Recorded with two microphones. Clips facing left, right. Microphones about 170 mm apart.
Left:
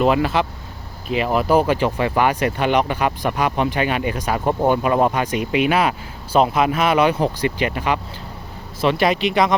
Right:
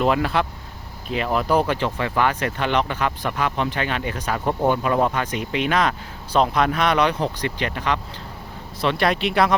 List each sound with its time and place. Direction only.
0.0 s speech: centre (ahead or behind)